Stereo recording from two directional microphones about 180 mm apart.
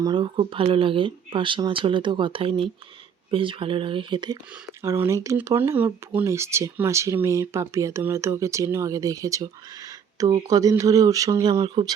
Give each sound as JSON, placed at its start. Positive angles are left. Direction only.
{"t": 0.0, "sound": "speech", "side_deg": -25}
{"t": 4.8, "sound": "speech", "side_deg": -15}